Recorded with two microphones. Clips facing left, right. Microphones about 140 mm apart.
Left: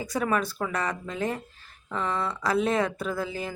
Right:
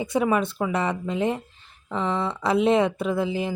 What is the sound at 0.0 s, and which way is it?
Speech, 25° right (ahead or behind).